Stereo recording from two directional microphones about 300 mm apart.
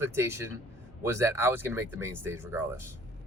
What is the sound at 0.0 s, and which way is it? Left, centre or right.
Speech, centre.